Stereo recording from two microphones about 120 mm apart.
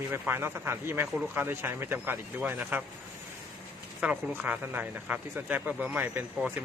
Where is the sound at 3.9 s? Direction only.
10° right (ahead or behind).